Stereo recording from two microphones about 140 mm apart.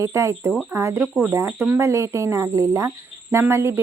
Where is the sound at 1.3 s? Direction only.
20° right (ahead or behind).